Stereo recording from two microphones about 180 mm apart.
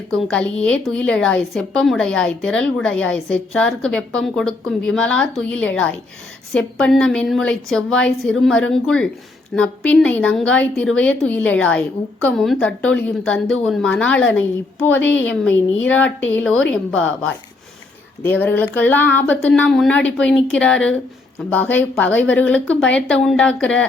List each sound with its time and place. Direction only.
0.3 s a woman's voice: 5° left (ahead or behind)
18.2 s a woman's voice: 10° left (ahead or behind)